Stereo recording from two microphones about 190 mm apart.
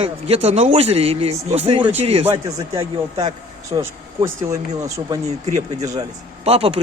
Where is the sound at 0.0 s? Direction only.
30° right (ahead or behind).